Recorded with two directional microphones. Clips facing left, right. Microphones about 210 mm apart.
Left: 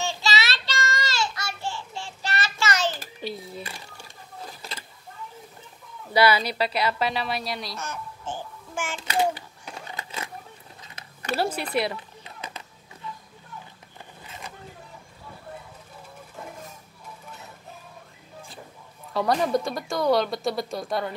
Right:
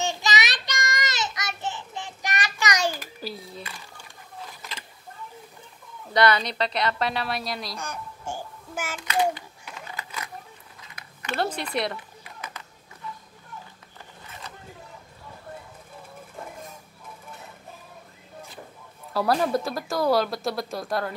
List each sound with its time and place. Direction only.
0.0 s child singing: 20° right (ahead or behind)
3.2 s a sound: centre (ahead or behind)
6.1 s speech: 5° left (ahead or behind)
7.8 s babbling: 10° right (ahead or behind)
8.9 s a child's voice: 25° left (ahead or behind)
9.7 s a sound: 30° left (ahead or behind)
11.3 s speech: 5° left (ahead or behind)
14.2 s a sound: 20° left (ahead or behind)
19.1 s speech: 5° right (ahead or behind)